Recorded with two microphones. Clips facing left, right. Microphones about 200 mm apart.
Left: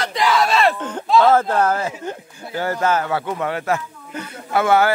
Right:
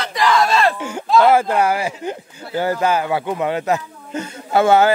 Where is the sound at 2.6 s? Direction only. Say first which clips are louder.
Right 2 dB; 15° right (ahead or behind).